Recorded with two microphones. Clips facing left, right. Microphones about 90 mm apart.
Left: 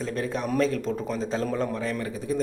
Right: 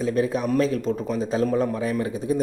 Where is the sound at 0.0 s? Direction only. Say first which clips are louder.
Right 6 dB; 5° right (ahead or behind).